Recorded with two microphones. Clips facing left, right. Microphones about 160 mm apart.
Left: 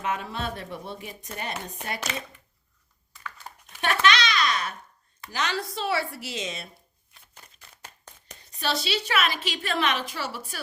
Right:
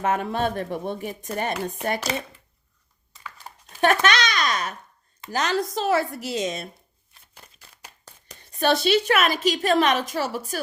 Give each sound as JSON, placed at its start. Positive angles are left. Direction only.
{"t": 0.0, "sound": "a woman's voice", "side_deg": -50}
{"t": 3.1, "sound": "a sound", "side_deg": -20}
{"t": 3.7, "sound": "babbling", "side_deg": -45}
{"t": 5.3, "sound": "a woman's voice", "side_deg": -45}
{"t": 8.5, "sound": "a woman's voice", "side_deg": -50}